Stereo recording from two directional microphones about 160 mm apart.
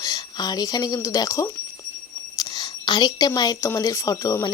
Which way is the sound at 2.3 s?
25° left (ahead or behind).